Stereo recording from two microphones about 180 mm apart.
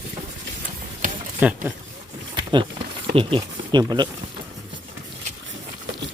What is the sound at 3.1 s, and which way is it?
Speech, 30° right (ahead or behind).